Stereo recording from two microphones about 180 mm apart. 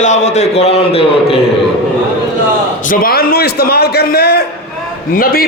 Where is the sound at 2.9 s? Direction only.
55° left (ahead or behind).